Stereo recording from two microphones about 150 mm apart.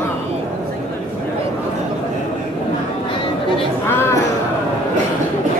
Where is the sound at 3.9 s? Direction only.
15° left (ahead or behind).